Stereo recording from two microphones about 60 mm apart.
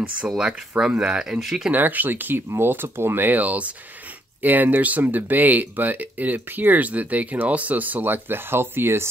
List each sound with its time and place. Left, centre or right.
0.3 s speech: centre
1.7 s speech: right